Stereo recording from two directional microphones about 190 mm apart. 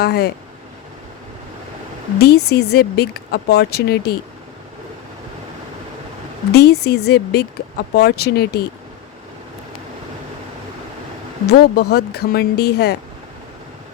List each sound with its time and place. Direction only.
0.0 s speech: 55° left (ahead or behind)
2.1 s speech: 60° left (ahead or behind)
6.5 s speech: 60° left (ahead or behind)
11.4 s speech: 55° left (ahead or behind)